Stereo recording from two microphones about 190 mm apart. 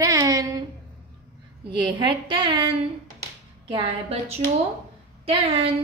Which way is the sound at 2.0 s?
25° right (ahead or behind).